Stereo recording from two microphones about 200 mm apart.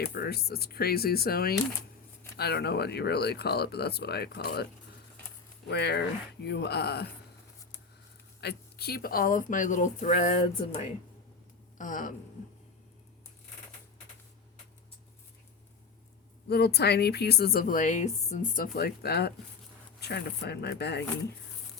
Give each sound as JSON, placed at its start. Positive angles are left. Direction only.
{"t": 0.0, "sound": "a woman's voice", "side_deg": 50}
{"t": 5.6, "sound": "speech", "side_deg": 55}
{"t": 8.4, "sound": "speech", "side_deg": 55}
{"t": 16.5, "sound": "a woman's voice", "side_deg": 55}